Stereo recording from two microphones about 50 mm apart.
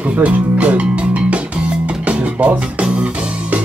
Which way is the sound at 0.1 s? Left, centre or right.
Right.